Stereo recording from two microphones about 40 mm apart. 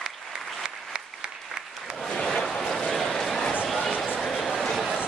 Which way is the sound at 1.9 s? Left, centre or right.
Centre.